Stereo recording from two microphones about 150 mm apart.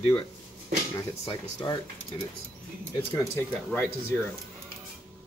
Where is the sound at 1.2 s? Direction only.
30° left (ahead or behind).